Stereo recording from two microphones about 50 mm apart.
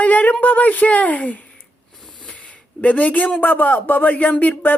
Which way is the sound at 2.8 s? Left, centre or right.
Left.